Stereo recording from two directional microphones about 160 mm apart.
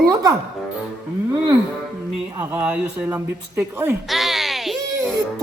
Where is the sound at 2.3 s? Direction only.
10° right (ahead or behind).